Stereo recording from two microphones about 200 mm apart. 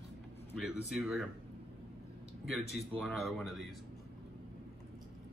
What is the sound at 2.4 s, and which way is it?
A man's voice, centre (ahead or behind).